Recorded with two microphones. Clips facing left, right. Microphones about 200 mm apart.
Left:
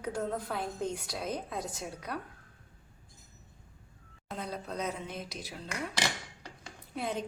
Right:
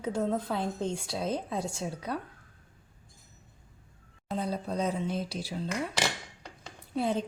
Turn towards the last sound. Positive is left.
turn(degrees=-30)  # may be behind; listen again after turning